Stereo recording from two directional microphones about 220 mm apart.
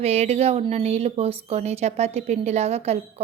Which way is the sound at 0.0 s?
30° right (ahead or behind).